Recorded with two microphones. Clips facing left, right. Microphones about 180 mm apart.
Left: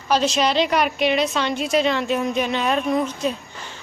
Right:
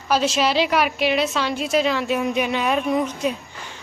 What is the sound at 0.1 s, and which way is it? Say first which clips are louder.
Speech: even; 5° right (ahead or behind).